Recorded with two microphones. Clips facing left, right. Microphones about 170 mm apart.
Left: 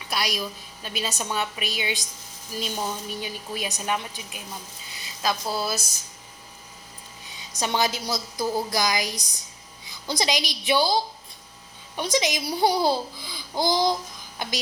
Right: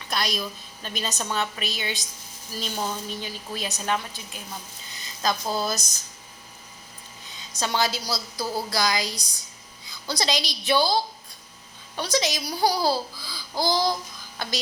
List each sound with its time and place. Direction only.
0.1 s a woman's voice: 10° left (ahead or behind)
7.3 s a woman's voice: 15° left (ahead or behind)